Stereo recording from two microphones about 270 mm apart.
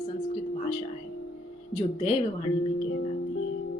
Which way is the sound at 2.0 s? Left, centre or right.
Left.